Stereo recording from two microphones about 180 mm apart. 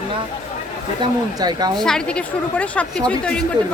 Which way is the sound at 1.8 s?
5° left (ahead or behind).